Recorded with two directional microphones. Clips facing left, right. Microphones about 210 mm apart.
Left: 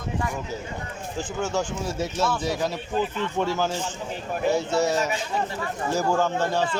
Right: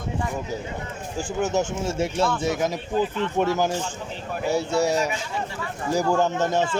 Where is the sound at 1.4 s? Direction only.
20° right (ahead or behind).